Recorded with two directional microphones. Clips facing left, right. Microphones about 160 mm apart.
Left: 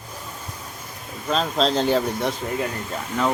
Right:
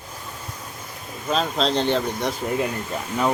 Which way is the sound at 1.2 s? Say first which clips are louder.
Left 1 dB; centre (ahead or behind).